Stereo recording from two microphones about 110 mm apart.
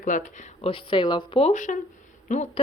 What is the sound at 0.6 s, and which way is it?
Speech, 55° left (ahead or behind).